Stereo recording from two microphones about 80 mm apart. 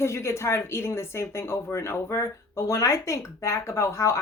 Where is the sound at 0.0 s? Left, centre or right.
Left.